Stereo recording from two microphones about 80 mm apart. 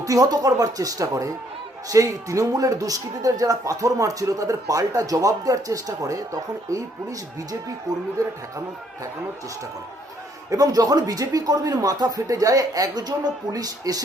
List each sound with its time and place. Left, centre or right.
0.0 s a man's voice: right
10.5 s a man's voice: right